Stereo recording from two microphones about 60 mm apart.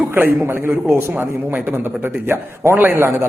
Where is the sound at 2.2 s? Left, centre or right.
Right.